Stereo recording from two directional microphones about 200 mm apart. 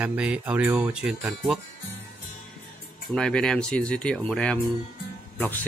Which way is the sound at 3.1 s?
5° left (ahead or behind).